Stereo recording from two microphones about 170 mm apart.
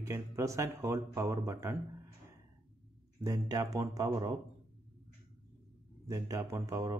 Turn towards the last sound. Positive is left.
turn(degrees=-15)  # may be behind; listen again after turning